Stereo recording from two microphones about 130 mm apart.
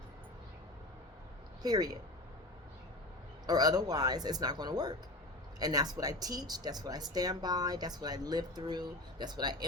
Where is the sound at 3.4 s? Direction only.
30° right (ahead or behind).